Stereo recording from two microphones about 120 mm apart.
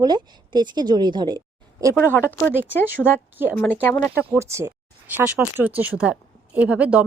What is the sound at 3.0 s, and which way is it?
Speech, 10° left (ahead or behind).